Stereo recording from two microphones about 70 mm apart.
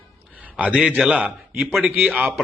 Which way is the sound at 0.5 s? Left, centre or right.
Centre.